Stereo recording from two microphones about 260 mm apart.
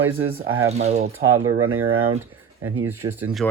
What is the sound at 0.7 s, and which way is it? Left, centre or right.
Speech, right.